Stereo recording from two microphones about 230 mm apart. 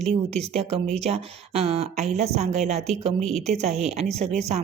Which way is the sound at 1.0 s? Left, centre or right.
Right.